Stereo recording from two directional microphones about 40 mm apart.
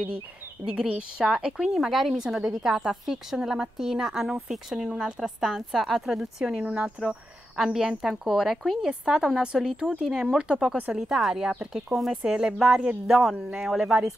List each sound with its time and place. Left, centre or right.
0.7 s speech: right
1.9 s speech: centre
2.4 s speech: centre
6.4 s speech: right
7.5 s speech: centre